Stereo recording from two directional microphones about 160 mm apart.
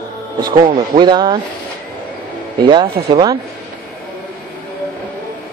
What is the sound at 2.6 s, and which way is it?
Speech, 30° right (ahead or behind).